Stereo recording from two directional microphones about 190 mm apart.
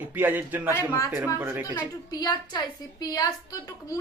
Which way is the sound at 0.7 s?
15° left (ahead or behind).